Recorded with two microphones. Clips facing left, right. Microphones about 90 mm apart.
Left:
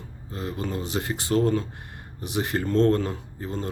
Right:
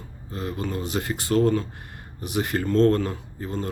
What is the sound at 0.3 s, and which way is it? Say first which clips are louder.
Speech: right 1 dB; 25° left (ahead or behind).